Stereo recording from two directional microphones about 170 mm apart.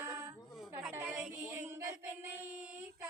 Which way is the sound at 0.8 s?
5° right (ahead or behind).